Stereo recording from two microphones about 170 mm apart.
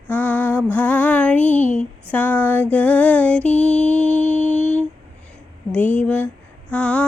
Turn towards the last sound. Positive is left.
turn(degrees=5)  # may be behind; listen again after turning